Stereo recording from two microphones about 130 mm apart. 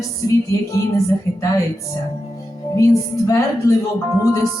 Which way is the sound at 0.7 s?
25° left (ahead or behind).